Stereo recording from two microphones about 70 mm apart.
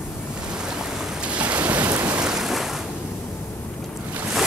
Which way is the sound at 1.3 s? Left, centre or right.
Centre.